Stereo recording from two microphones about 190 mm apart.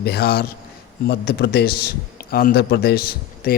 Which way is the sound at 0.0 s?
55° left (ahead or behind).